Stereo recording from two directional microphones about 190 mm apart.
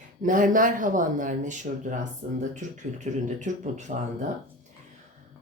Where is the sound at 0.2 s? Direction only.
45° right (ahead or behind).